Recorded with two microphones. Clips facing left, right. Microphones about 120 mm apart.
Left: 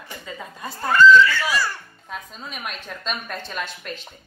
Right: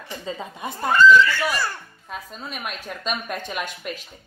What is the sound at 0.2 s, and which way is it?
Speech, 25° right (ahead or behind).